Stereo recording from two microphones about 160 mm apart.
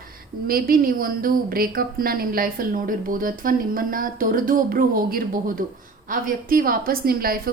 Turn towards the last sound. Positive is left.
turn(degrees=-65)  # may be behind; listen again after turning